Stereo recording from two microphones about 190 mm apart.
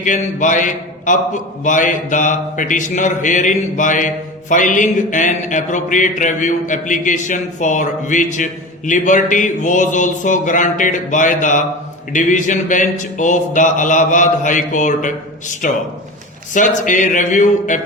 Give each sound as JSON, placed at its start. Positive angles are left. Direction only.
{"t": 0.0, "sound": "a man's voice", "side_deg": 40}